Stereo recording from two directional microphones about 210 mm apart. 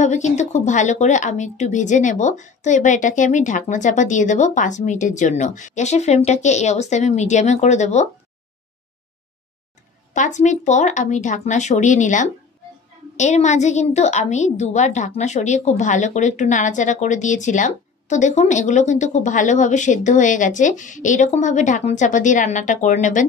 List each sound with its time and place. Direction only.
0.0 s a woman's voice: 35° left (ahead or behind)
10.1 s a woman's voice: 35° left (ahead or behind)